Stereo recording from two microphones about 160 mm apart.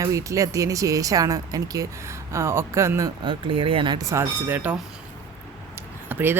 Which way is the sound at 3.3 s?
30° right (ahead or behind).